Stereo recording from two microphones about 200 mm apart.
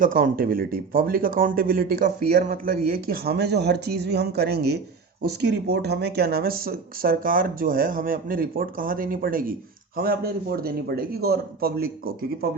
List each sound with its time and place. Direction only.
0.0 s speech: 45° right (ahead or behind)